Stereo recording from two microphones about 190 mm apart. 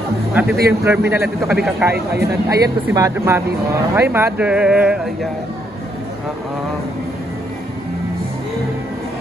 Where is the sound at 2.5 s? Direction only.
20° right (ahead or behind).